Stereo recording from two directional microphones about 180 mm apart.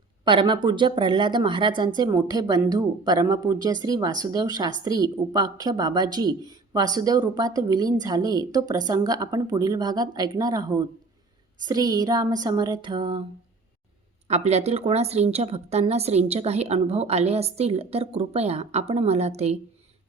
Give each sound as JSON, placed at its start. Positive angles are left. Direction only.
{"t": 0.3, "sound": "a woman's voice", "side_deg": -25}
{"t": 14.3, "sound": "a woman's voice", "side_deg": -35}